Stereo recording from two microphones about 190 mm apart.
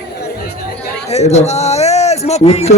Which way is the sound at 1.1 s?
35° left (ahead or behind).